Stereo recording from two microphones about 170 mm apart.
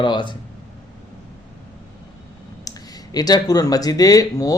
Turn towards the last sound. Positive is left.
turn(degrees=20)  # may be behind; listen again after turning